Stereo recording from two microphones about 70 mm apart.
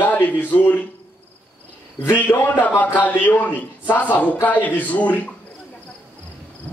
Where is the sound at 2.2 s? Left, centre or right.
Left.